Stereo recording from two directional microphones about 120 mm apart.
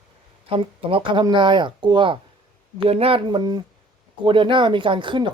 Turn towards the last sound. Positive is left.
turn(degrees=-40)  # may be behind; listen again after turning